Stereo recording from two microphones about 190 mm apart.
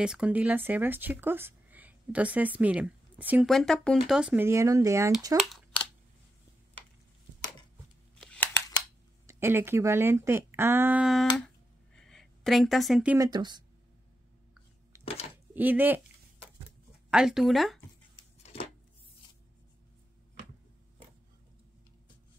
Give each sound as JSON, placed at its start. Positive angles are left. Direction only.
{"t": 0.0, "sound": "speech", "side_deg": -5}
{"t": 3.5, "sound": "speech", "side_deg": 5}
{"t": 5.4, "sound": "a sound", "side_deg": 0}
{"t": 8.2, "sound": "a sound", "side_deg": 5}
{"t": 9.2, "sound": "speech", "side_deg": -15}
{"t": 11.3, "sound": "a sound", "side_deg": 5}
{"t": 13.2, "sound": "speech", "side_deg": -20}
{"t": 15.5, "sound": "speech", "side_deg": -10}
{"t": 17.1, "sound": "speech", "side_deg": -5}